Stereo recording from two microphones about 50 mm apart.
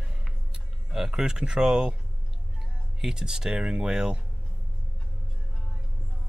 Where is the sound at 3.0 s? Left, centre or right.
Centre.